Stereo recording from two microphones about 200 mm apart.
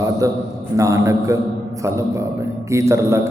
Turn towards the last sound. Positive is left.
turn(degrees=-15)  # may be behind; listen again after turning